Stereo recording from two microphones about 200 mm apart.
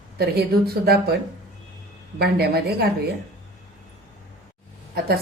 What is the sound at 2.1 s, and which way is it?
Speech, 50° right (ahead or behind).